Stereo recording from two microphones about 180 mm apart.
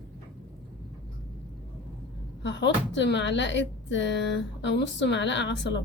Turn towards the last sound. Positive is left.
turn(degrees=80)